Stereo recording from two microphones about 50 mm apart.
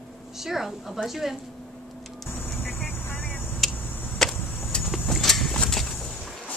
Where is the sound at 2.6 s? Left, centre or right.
Centre.